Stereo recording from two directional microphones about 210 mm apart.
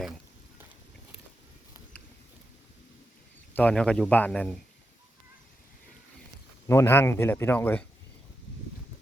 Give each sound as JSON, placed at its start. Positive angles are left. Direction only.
{"t": 3.5, "sound": "speech", "side_deg": 5}
{"t": 6.7, "sound": "speech", "side_deg": 10}